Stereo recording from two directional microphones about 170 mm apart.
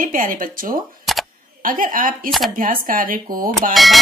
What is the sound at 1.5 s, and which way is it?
A woman's voice, 55° right (ahead or behind).